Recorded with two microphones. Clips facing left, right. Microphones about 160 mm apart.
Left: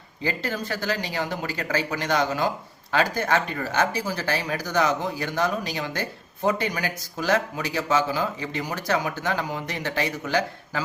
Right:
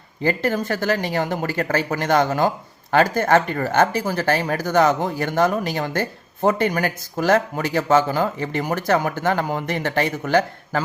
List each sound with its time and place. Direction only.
0.2 s speech: 50° right (ahead or behind)